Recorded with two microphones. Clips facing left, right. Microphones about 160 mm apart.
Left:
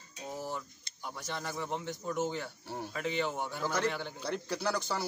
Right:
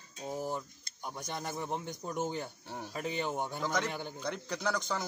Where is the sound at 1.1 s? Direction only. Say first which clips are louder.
Even; 20° right (ahead or behind).